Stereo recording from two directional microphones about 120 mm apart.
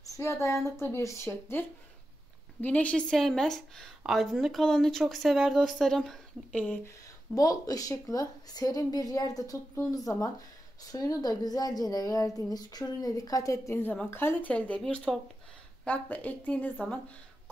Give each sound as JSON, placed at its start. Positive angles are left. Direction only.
{"t": 0.0, "sound": "a woman's voice", "side_deg": 25}
{"t": 7.3, "sound": "a woman's voice", "side_deg": 30}